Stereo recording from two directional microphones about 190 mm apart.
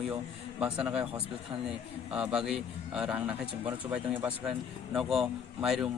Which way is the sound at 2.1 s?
5° right (ahead or behind).